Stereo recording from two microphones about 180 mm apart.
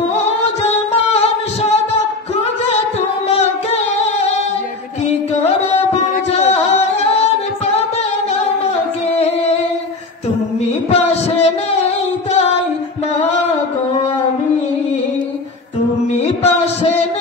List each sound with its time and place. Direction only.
0.6 s music: 35° left (ahead or behind)
5.4 s music: 35° left (ahead or behind)
10.9 s female singing: 35° left (ahead or behind)
16.1 s music: 35° left (ahead or behind)